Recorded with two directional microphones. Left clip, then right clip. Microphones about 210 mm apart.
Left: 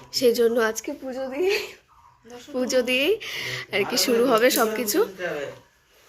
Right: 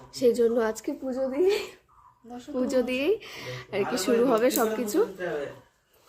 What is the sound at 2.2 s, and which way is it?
Speech, 60° right (ahead or behind).